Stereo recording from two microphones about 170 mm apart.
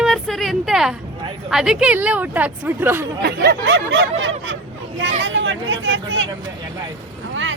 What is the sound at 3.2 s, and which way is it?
Speech, 75° right (ahead or behind).